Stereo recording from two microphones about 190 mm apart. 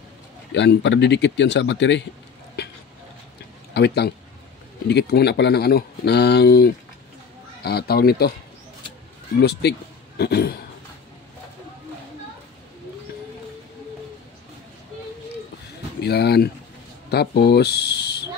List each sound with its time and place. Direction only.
0.6 s speech: 70° left (ahead or behind)
3.7 s speech: 60° left (ahead or behind)
9.4 s speech: 60° left (ahead or behind)
16.0 s speech: 60° left (ahead or behind)